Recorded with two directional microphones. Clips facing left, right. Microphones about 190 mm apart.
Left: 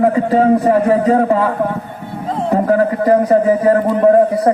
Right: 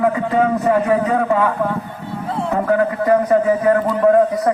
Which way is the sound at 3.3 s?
30° left (ahead or behind).